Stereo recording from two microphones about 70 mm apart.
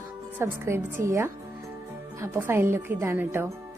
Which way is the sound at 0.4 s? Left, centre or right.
Right.